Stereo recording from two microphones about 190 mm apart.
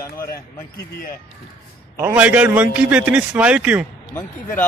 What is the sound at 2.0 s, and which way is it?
A man's voice, 10° right (ahead or behind).